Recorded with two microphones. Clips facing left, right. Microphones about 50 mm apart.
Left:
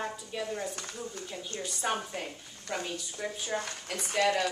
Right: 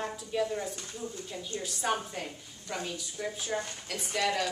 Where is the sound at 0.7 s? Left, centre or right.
Left.